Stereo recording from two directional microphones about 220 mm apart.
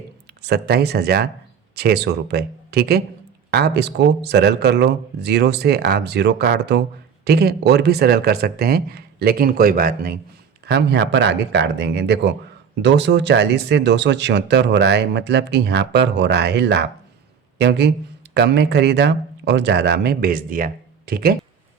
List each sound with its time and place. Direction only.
0.4 s speech: 45° right (ahead or behind)